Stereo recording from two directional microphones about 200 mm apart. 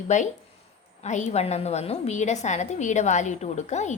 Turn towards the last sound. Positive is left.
turn(degrees=35)  # may be behind; listen again after turning